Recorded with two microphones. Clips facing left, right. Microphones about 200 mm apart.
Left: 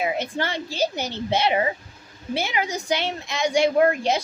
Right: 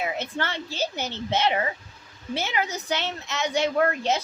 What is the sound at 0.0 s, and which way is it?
A woman's voice, 15° left (ahead or behind).